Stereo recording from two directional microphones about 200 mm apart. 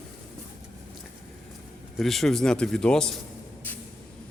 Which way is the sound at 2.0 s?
Centre (ahead or behind).